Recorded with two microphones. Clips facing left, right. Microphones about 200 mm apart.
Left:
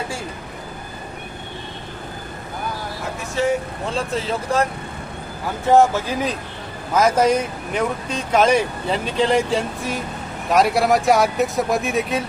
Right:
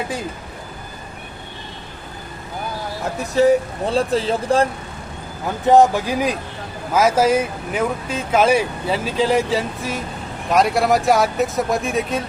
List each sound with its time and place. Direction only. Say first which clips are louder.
3.4 s speech: right 6 dB; 40° right (ahead or behind)
5.6 s speech: right 2 dB; 15° right (ahead or behind); by 12.2 s centre (ahead or behind)